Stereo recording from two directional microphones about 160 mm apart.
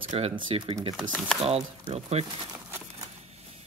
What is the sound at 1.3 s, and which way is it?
Speech, 40° right (ahead or behind).